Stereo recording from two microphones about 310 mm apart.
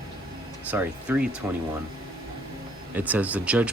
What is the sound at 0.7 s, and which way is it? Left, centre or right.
Speech, centre.